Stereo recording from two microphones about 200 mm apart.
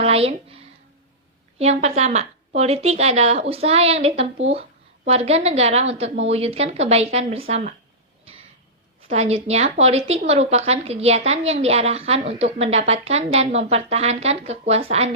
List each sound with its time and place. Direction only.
0.0 s a woman's voice: 30° right (ahead or behind)
9.0 s a woman's voice: 30° right (ahead or behind)